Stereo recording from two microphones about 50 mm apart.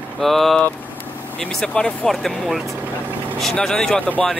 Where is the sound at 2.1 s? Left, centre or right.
Centre.